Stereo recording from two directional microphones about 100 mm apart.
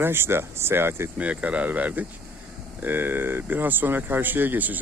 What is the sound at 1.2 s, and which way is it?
Speech, 15° right (ahead or behind).